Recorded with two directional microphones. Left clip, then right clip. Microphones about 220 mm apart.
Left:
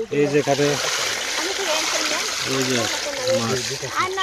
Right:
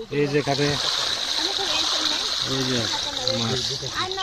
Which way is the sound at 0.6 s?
45° left (ahead or behind).